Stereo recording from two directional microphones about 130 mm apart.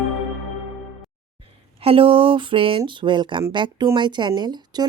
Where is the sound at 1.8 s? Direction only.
45° right (ahead or behind).